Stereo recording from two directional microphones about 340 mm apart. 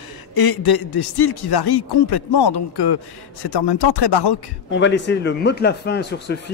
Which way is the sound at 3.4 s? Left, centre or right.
Left.